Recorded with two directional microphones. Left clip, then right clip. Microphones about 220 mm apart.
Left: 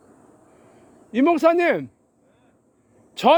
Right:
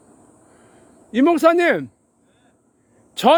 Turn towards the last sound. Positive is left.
turn(degrees=-20)  # may be behind; listen again after turning